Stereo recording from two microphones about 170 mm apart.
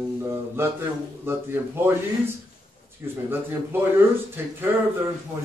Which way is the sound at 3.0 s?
10° right (ahead or behind).